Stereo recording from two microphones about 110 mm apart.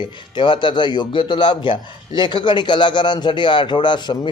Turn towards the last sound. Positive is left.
turn(degrees=40)  # may be behind; listen again after turning